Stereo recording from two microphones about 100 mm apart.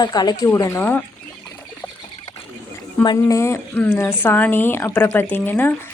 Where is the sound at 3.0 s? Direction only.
40° left (ahead or behind).